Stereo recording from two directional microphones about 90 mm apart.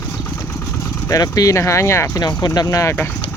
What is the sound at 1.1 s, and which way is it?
Speech, 40° left (ahead or behind).